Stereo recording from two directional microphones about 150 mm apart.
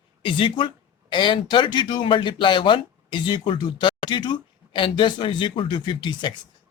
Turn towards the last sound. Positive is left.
turn(degrees=30)  # may be behind; listen again after turning